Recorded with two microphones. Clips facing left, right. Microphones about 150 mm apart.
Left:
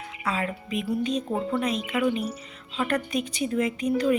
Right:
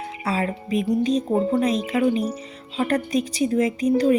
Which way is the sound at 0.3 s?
35° right (ahead or behind).